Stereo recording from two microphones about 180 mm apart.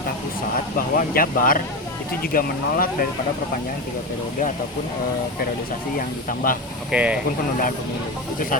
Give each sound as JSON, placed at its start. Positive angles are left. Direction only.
{"t": 0.5, "sound": "speech", "side_deg": 50}
{"t": 6.2, "sound": "speech", "side_deg": 50}
{"t": 6.9, "sound": "speech", "side_deg": -5}